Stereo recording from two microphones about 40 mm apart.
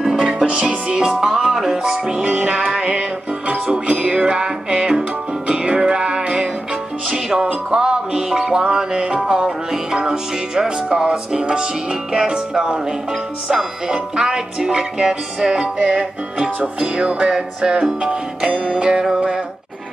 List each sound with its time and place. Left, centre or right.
0.0 s music: centre
0.5 s music: right
13.5 s speech: centre
16.4 s music: right